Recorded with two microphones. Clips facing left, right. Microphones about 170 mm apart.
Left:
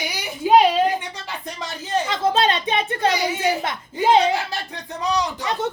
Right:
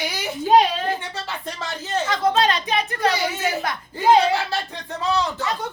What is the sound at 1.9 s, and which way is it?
A child's voice, 25° left (ahead or behind).